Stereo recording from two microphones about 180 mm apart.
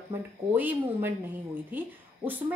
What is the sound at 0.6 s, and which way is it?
Speech, 10° right (ahead or behind).